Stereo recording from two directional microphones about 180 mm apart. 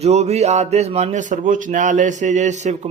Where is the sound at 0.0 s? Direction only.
35° right (ahead or behind).